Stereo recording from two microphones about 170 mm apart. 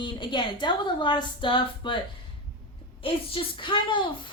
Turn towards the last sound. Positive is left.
turn(degrees=30)  # may be behind; listen again after turning